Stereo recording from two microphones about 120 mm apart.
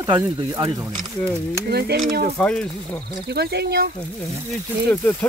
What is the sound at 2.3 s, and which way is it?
Speech, 10° left (ahead or behind).